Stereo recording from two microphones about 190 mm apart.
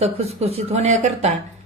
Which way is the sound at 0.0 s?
35° right (ahead or behind).